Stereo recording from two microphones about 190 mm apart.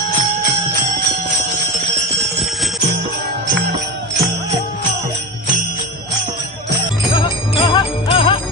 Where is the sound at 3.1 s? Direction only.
60° right (ahead or behind).